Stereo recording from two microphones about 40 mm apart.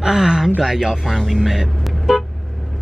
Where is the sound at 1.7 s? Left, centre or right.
Centre.